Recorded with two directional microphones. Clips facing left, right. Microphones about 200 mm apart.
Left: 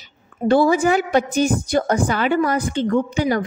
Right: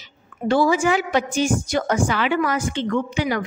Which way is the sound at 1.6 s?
35° left (ahead or behind).